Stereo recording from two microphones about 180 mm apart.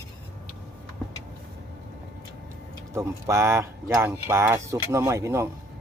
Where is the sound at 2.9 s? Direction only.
15° right (ahead or behind).